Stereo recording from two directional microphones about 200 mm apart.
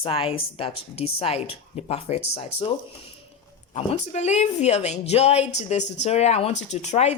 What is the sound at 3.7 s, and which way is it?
A woman's voice, 35° left (ahead or behind).